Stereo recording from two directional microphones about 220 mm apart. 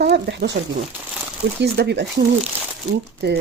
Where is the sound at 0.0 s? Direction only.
50° right (ahead or behind).